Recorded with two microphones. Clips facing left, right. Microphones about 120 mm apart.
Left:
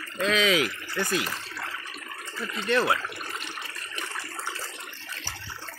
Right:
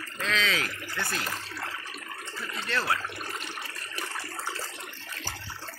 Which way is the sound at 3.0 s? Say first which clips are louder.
Even; 35° right (ahead or behind).